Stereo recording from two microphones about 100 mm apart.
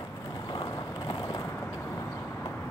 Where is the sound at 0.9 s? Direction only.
50° left (ahead or behind).